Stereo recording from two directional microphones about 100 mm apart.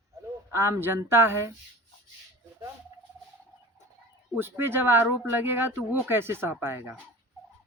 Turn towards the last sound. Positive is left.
turn(degrees=-25)  # may be behind; listen again after turning